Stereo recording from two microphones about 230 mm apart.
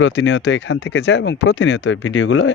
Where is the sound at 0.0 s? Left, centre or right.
Left.